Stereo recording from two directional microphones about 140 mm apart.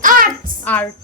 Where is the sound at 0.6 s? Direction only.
10° left (ahead or behind).